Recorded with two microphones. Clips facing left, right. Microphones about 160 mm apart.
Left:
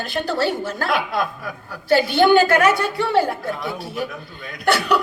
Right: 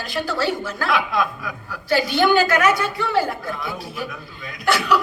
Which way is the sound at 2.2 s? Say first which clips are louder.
Left 3 dB; 30° left (ahead or behind).